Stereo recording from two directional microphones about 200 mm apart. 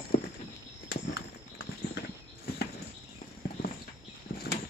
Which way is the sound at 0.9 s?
55° left (ahead or behind).